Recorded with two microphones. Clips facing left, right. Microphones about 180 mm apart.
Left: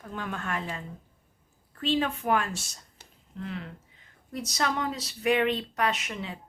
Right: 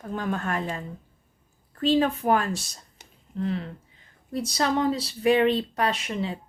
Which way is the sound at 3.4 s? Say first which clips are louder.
Right 8 dB; 35° right (ahead or behind).